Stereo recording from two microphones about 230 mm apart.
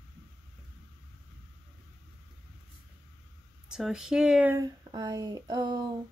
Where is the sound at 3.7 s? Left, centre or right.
Centre.